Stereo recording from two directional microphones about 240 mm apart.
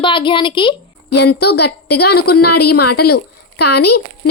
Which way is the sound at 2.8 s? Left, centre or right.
Left.